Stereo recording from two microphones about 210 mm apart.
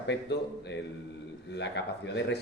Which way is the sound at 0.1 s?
55° left (ahead or behind).